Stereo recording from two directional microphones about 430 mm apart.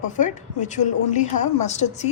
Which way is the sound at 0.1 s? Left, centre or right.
Centre.